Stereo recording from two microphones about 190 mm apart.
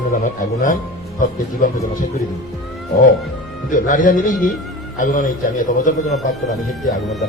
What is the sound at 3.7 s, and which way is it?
A man's voice, 45° left (ahead or behind).